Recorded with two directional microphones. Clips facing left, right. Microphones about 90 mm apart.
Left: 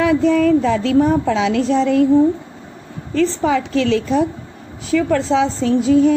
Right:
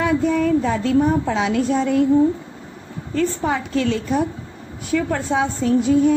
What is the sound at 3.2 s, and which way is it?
A woman's voice, 90° left.